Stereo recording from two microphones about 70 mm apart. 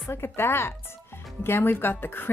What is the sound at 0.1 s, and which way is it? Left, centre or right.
Speech, left.